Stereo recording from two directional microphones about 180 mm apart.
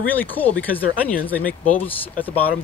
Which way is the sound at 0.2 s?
10° left (ahead or behind).